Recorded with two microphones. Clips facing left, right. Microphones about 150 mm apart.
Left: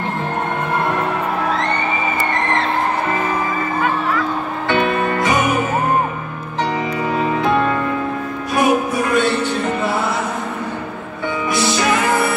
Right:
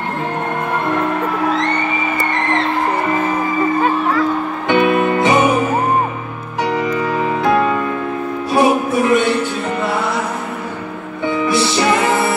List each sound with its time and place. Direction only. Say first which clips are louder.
4.6 s music: right 4 dB; 15° right (ahead or behind)
7.4 s music: right 3 dB; 5° right (ahead or behind)
8.5 s music: right 2 dB; 20° right (ahead or behind)